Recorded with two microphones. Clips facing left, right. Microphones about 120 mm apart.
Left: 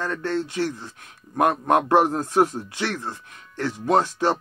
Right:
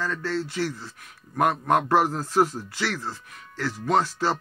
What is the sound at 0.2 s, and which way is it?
A man's voice, 20° left (ahead or behind).